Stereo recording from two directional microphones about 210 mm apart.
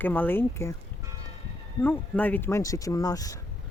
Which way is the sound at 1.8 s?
10° left (ahead or behind).